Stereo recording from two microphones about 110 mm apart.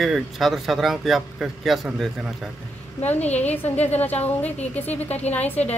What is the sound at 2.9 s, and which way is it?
Speech, 15° left (ahead or behind).